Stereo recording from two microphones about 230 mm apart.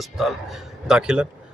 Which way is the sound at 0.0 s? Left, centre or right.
Centre.